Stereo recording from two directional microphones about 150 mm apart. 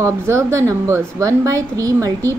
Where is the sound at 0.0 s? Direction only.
20° right (ahead or behind).